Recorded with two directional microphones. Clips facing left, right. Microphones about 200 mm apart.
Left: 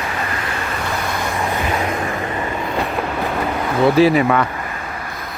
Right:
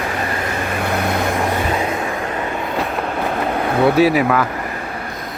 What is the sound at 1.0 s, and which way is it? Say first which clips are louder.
Vehicle: right 4 dB; 60° right (ahead or behind).